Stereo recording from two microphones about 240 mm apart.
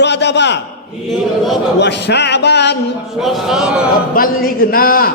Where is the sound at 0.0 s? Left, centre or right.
Left.